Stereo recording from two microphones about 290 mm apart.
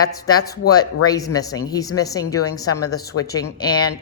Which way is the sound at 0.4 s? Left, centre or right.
Left.